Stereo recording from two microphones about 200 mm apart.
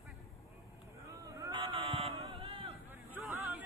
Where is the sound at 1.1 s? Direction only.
15° right (ahead or behind).